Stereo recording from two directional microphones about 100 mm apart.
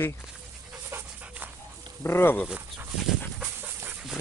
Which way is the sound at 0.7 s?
20° right (ahead or behind).